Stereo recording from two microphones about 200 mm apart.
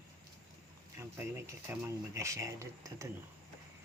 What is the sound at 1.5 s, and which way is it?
Speech, 15° right (ahead or behind).